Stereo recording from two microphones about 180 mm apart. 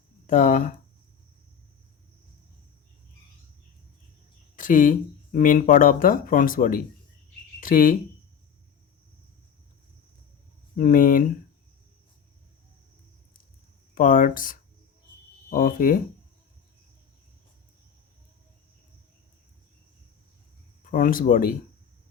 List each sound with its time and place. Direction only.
0.3 s speech: 45° left (ahead or behind)
4.5 s speech: 45° left (ahead or behind)
10.8 s speech: 50° left (ahead or behind)
13.9 s speech: 50° left (ahead or behind)
20.9 s speech: 50° left (ahead or behind)